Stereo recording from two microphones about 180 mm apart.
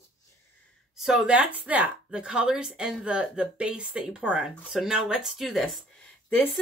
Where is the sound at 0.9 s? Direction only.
Centre (ahead or behind).